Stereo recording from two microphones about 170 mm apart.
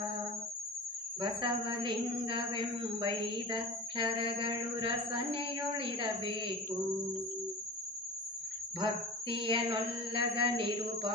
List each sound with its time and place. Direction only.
1.2 s a woman's voice: 30° right (ahead or behind)
9.3 s a woman's voice: 30° right (ahead or behind)